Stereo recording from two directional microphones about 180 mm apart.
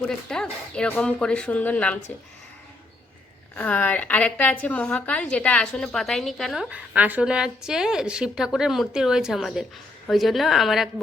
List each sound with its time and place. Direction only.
0.1 s a woman's voice: 5° left (ahead or behind)
3.5 s a woman's voice: 10° left (ahead or behind)